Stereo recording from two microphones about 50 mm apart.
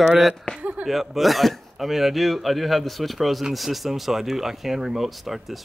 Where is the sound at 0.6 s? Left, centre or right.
Right.